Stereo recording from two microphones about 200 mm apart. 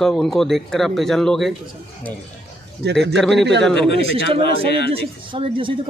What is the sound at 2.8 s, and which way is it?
Speech, 55° right (ahead or behind).